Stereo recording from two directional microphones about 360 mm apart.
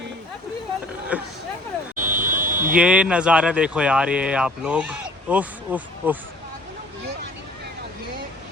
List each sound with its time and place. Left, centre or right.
1.1 s speech: centre
2.0 s buzzer: right
2.7 s speech: centre